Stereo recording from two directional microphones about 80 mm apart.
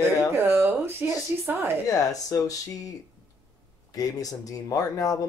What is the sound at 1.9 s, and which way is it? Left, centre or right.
Speech, left.